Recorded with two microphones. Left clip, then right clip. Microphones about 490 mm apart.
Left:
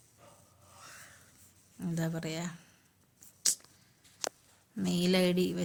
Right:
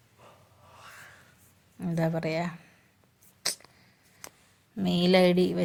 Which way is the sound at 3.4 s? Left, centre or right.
Left.